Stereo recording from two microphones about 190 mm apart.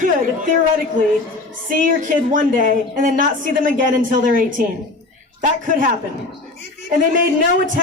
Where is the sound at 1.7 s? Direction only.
45° right (ahead or behind).